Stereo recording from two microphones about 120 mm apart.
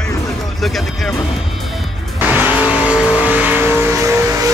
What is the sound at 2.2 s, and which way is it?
Vehicle, 15° right (ahead or behind).